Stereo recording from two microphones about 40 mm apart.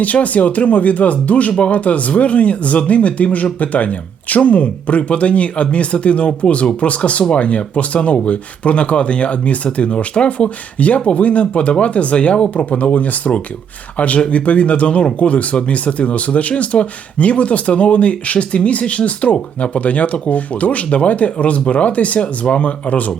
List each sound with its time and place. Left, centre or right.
0.0 s speech: left